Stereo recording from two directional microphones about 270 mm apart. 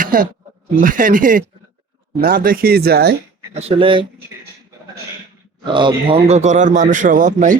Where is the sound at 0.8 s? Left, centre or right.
Right.